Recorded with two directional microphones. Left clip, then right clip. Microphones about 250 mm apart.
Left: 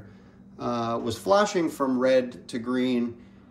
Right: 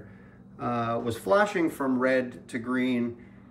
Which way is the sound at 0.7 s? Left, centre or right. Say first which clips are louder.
Left 1 dB; centre.